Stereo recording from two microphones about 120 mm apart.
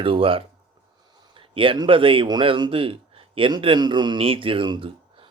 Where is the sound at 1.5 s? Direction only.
45° right (ahead or behind).